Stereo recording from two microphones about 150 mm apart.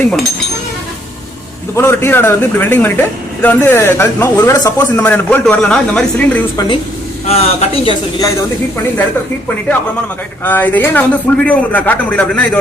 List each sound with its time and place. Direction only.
0.0 s speech: 5° left (ahead or behind)
1.7 s speech: 15° left (ahead or behind)
7.3 s speech: 45° left (ahead or behind)
10.4 s speech: 10° left (ahead or behind)